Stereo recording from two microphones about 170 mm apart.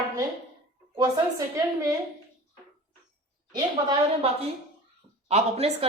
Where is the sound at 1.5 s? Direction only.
20° right (ahead or behind).